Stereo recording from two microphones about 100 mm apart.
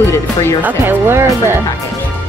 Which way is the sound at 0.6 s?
20° right (ahead or behind).